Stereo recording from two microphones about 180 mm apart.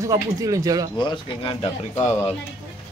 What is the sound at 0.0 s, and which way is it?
Speech, 20° right (ahead or behind).